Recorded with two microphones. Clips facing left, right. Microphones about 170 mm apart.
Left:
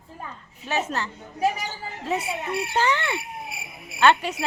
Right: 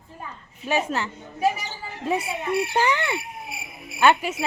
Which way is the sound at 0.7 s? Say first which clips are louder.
Right 3 dB; 15° right (ahead or behind).